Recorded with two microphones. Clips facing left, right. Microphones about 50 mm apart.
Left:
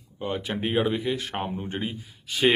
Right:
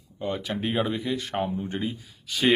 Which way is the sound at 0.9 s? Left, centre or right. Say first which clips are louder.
Even; left.